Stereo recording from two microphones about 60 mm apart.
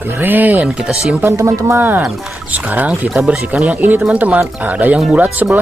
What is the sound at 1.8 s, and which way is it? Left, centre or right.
Speech, right.